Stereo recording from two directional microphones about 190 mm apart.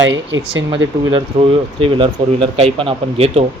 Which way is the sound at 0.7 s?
25° right (ahead or behind).